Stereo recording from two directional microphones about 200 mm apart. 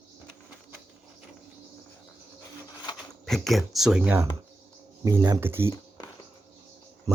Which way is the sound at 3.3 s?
Centre (ahead or behind).